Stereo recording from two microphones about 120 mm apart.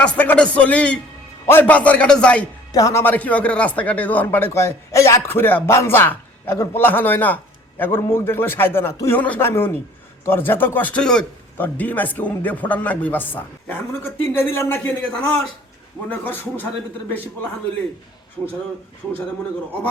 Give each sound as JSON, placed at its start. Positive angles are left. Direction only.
{"t": 0.0, "sound": "speech", "side_deg": 10}
{"t": 2.7, "sound": "a man's voice", "side_deg": 30}
{"t": 3.0, "sound": "a man's voice", "side_deg": 15}
{"t": 16.0, "sound": "speech", "side_deg": 15}